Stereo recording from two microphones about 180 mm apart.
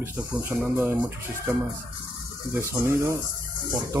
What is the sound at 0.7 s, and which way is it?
Speech, 10° right (ahead or behind).